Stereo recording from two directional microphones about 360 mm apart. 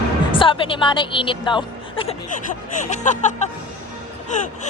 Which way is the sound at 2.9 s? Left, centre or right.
Centre.